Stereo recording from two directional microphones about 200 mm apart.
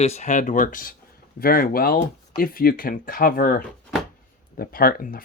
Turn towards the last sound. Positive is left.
turn(degrees=45)  # may be behind; listen again after turning